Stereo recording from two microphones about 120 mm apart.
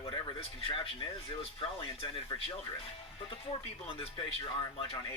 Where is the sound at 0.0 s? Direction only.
50° left (ahead or behind).